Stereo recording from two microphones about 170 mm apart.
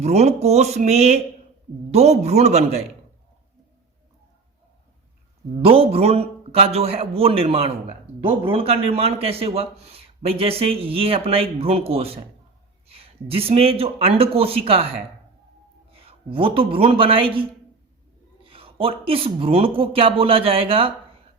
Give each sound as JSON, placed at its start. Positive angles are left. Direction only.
{"t": 0.0, "sound": "a man's voice", "side_deg": -40}
{"t": 5.6, "sound": "a man's voice", "side_deg": -35}
{"t": 18.4, "sound": "a man's voice", "side_deg": -35}